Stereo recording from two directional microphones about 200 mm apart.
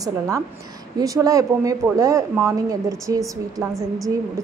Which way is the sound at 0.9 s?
15° right (ahead or behind).